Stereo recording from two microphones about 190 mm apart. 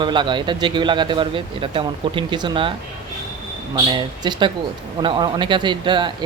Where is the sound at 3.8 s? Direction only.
25° right (ahead or behind).